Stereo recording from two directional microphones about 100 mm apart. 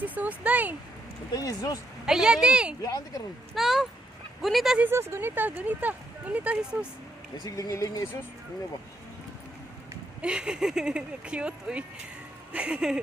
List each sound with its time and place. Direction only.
0.0 s speech: 15° right (ahead or behind)
1.3 s speech: 40° left (ahead or behind)
2.0 s speech: 5° right (ahead or behind)
4.8 s speech: 25° right (ahead or behind)
7.3 s speech: 40° left (ahead or behind)
10.2 s speech: 10° right (ahead or behind)